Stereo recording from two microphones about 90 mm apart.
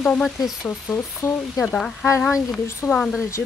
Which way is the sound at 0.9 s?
30° left (ahead or behind).